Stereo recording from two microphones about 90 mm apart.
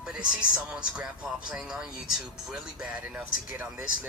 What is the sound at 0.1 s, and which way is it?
Speech, 10° right (ahead or behind).